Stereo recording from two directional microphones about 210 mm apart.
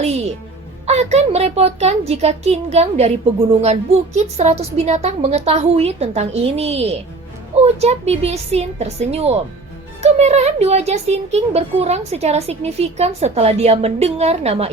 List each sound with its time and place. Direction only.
0.9 s a woman's voice: 30° right (ahead or behind)